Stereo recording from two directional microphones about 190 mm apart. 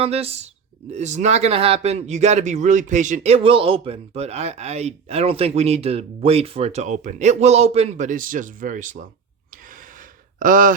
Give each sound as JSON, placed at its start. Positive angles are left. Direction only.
{"t": 0.0, "sound": "speech", "side_deg": -30}
{"t": 10.4, "sound": "speech", "side_deg": -45}